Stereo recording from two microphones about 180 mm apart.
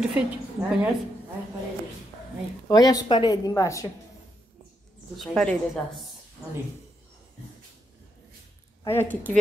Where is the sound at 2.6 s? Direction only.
20° left (ahead or behind).